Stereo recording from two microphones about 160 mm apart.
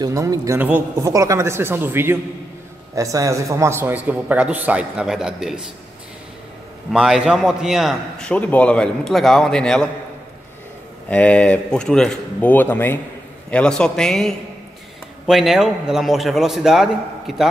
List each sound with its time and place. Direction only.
0.0 s a man's voice: 20° right (ahead or behind); by 5.7 s 5° right (ahead or behind)
6.9 s a man's voice: 5° right (ahead or behind)
11.1 s a man's voice: 10° left (ahead or behind)